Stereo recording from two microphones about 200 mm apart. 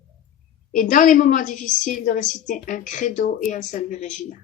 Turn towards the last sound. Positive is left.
turn(degrees=35)  # may be behind; listen again after turning